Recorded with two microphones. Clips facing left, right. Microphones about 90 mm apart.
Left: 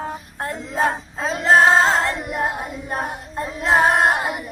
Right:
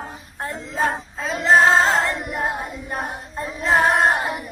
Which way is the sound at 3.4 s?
20° left (ahead or behind).